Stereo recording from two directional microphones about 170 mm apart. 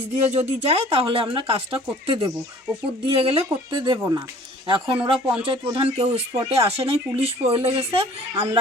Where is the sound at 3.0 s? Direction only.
35° right (ahead or behind).